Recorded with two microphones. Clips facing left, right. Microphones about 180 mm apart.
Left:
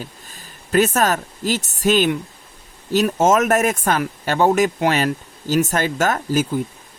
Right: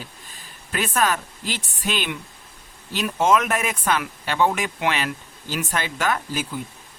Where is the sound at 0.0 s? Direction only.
45° left (ahead or behind).